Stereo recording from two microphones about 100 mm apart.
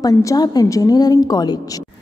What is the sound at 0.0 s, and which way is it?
A woman's voice, 35° left (ahead or behind).